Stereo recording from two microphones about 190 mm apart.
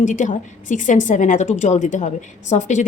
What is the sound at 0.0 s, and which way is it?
A woman's voice, 40° left (ahead or behind).